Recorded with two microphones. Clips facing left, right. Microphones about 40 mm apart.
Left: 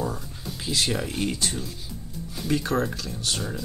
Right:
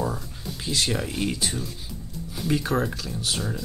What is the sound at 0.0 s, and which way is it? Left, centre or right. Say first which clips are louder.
Speech: right 1 dB; centre.